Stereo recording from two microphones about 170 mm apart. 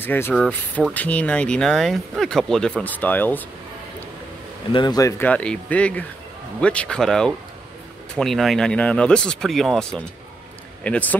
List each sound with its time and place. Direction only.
0.0 s speech: 10° left (ahead or behind)
4.7 s speech: 20° left (ahead or behind)
5.2 s speech: 5° left (ahead or behind)